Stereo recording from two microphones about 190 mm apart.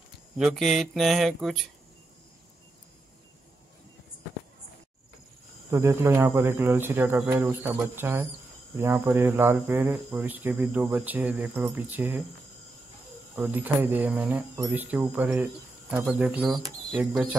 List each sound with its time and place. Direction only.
0.4 s speech: centre (ahead or behind)
5.7 s speech: 15° right (ahead or behind)
13.4 s speech: 10° right (ahead or behind)